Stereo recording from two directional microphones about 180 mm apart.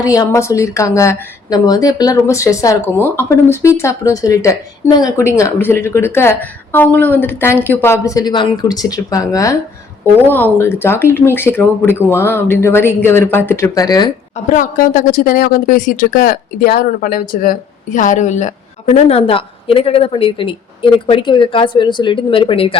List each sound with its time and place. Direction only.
0.0 s speech: 20° left (ahead or behind)
14.5 s speech: 45° left (ahead or behind)